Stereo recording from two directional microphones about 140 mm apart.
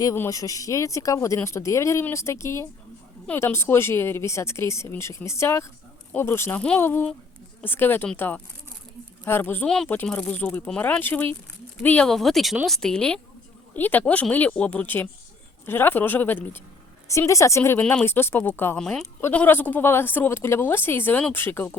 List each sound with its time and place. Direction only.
0.0 s a woman's voice: 20° left (ahead or behind)
18.8 s speech: 5° left (ahead or behind)